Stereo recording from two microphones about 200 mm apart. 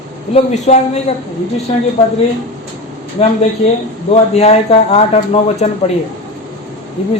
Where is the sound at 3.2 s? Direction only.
30° left (ahead or behind).